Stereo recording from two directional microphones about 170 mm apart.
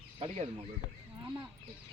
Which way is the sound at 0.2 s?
35° right (ahead or behind).